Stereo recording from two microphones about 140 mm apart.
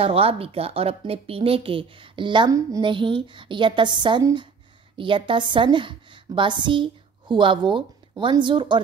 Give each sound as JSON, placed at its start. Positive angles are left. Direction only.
{"t": 0.0, "sound": "a woman's voice", "side_deg": -45}